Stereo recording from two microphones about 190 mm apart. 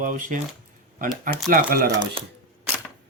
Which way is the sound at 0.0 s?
45° right (ahead or behind).